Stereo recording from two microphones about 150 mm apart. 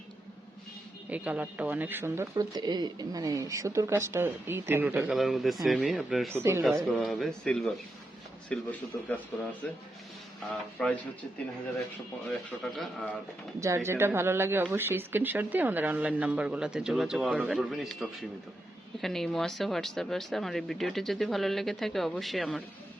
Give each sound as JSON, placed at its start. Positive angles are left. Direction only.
{"t": 1.1, "sound": "speech", "side_deg": -10}
{"t": 5.1, "sound": "speech", "side_deg": 0}
{"t": 6.3, "sound": "speech", "side_deg": -15}
{"t": 6.9, "sound": "speech", "side_deg": 0}
{"t": 10.8, "sound": "speech", "side_deg": 5}
{"t": 12.3, "sound": "speech", "side_deg": 0}
{"t": 13.6, "sound": "speech", "side_deg": -20}